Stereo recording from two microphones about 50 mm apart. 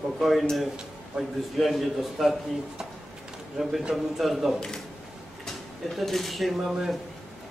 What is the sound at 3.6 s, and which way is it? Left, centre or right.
Speech, centre.